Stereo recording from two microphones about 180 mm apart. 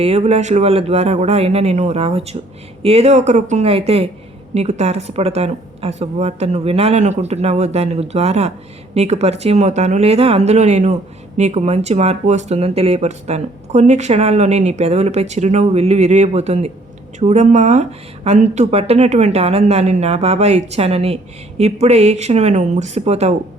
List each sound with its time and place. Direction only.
0.0 s speech: 35° right (ahead or behind)